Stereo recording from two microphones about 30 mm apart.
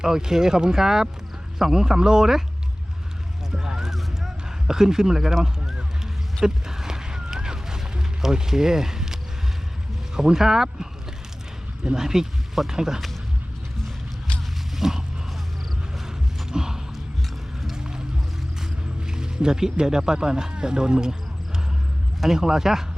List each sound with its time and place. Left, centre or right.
0.0 s speech: centre
3.5 s a sound: centre
4.6 s speech: centre
6.4 s a sound: centre
10.2 s speech: centre
11.9 s speech: centre
14.8 s speech: centre
16.5 s basketball bounce: centre
17.7 s a sound: right
19.0 s a sound: right
19.8 s speech: centre
22.3 s speech: centre